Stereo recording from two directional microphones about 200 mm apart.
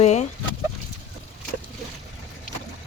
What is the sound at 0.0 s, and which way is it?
Chicken, 35° left (ahead or behind).